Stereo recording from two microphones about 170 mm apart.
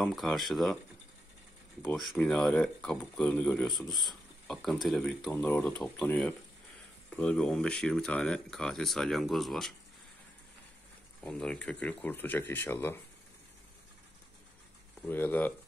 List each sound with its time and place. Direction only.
0.0 s speech: centre (ahead or behind)
1.9 s speech: 5° left (ahead or behind)
11.2 s speech: 5° left (ahead or behind)
15.0 s speech: 10° left (ahead or behind)